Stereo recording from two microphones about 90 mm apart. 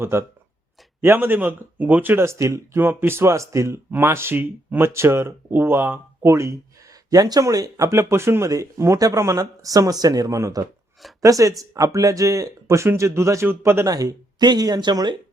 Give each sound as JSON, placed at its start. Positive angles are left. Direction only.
{"t": 0.0, "sound": "speech", "side_deg": -30}
{"t": 7.1, "sound": "speech", "side_deg": -45}
{"t": 13.8, "sound": "speech", "side_deg": -40}